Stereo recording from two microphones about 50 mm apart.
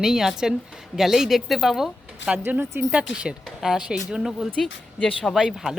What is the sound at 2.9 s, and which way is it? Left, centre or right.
A woman's voice, right.